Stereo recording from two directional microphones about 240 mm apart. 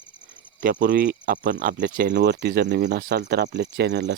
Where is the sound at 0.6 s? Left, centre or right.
Right.